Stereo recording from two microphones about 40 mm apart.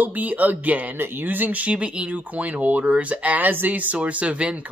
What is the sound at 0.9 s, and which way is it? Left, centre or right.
Speech, right.